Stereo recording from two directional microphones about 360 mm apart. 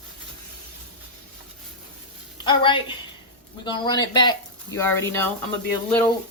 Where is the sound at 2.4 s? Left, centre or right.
Centre.